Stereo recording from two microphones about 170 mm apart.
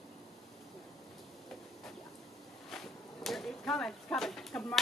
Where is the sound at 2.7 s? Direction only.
Centre (ahead or behind).